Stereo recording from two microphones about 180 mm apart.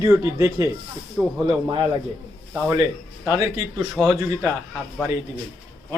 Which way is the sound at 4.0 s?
5° right (ahead or behind).